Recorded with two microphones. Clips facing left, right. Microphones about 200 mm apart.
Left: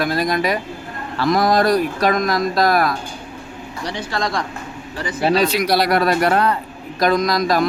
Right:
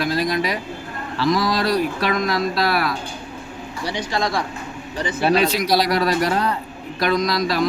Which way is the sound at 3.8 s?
15° right (ahead or behind).